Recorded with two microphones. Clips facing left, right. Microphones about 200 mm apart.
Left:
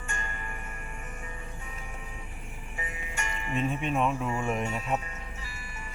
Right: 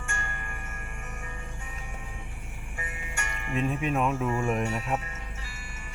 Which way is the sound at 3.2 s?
50° right (ahead or behind).